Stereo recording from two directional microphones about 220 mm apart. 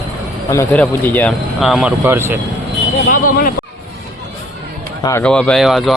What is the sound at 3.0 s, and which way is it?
Speech, 40° left (ahead or behind).